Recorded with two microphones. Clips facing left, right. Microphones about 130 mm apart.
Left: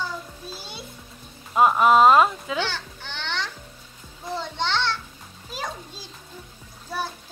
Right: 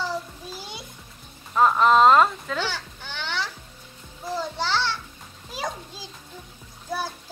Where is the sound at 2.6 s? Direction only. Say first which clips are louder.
Left 1 dB; 10° right (ahead or behind).